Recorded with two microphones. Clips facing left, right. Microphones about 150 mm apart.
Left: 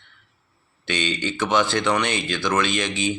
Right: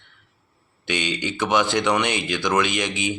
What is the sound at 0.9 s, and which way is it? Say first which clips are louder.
Speech: even; 15° right (ahead or behind).